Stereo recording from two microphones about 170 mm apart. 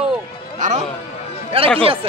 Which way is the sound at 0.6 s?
45° right (ahead or behind).